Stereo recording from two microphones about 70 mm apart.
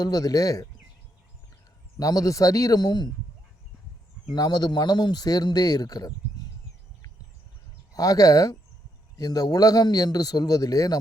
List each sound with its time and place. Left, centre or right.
0.0 s a man's voice: left
2.0 s a man's voice: left
4.3 s speech: left
7.9 s a man's voice: left